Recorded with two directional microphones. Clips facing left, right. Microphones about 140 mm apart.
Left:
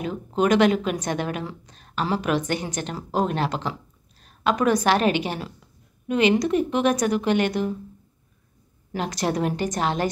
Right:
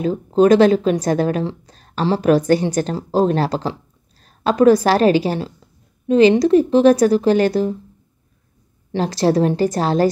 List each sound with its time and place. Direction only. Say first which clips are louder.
0.0 s a woman's voice: right 9 dB; 35° right (ahead or behind)
8.9 s a woman's voice: right 8 dB; 30° right (ahead or behind)